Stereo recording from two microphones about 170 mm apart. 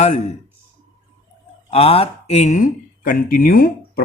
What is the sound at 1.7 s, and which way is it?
Speech, 35° left (ahead or behind).